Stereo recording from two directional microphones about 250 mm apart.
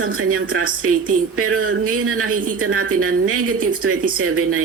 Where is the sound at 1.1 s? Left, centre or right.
Right.